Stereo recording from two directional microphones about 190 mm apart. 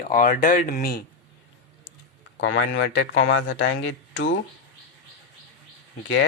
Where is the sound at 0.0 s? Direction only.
45° left (ahead or behind).